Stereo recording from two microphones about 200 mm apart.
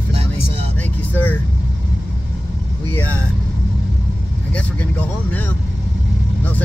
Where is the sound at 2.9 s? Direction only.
5° left (ahead or behind).